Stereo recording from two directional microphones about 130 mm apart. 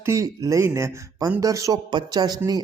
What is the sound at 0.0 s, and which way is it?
Speech, 20° right (ahead or behind).